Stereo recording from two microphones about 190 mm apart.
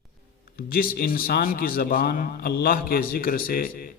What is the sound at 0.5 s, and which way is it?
A man's voice, 50° left (ahead or behind).